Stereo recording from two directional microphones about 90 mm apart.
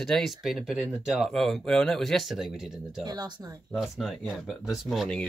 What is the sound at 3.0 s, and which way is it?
Speech, 50° right (ahead or behind).